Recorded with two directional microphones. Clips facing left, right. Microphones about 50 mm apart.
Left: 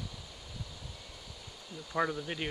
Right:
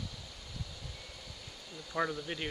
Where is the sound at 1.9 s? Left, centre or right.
Centre.